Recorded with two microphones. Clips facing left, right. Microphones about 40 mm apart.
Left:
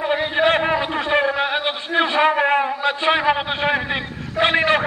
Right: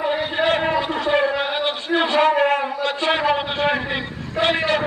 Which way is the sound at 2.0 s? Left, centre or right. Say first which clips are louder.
Even; centre.